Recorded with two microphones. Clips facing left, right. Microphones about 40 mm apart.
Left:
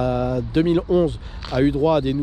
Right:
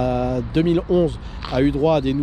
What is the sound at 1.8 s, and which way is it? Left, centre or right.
Speech, right.